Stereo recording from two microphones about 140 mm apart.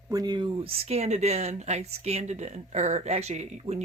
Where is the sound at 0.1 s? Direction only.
30° right (ahead or behind).